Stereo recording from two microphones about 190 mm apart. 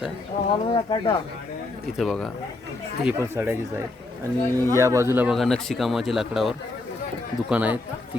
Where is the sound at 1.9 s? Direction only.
Centre (ahead or behind).